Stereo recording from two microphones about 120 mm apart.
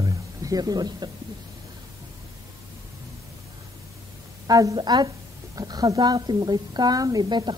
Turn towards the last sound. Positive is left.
turn(degrees=-40)  # may be behind; listen again after turning